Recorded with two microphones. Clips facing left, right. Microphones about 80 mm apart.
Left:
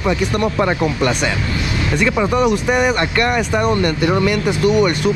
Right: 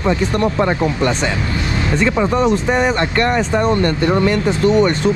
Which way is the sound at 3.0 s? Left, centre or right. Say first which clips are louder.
Right 1 dB; right.